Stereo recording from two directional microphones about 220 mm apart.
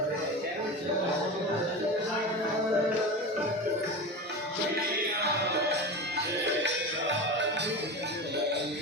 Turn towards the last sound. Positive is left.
turn(degrees=-55)  # may be behind; listen again after turning